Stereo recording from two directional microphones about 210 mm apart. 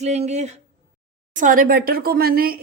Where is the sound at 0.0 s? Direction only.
30° right (ahead or behind).